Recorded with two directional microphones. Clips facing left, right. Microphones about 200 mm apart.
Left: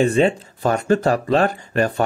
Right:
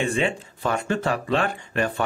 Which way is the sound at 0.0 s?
40° left (ahead or behind).